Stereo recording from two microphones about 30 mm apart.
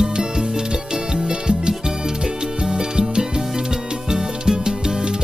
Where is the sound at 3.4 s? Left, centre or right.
Centre.